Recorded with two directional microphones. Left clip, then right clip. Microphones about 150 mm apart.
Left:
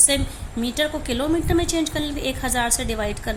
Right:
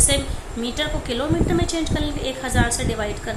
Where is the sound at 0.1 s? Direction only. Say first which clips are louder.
Right 1 dB; 55° left (ahead or behind).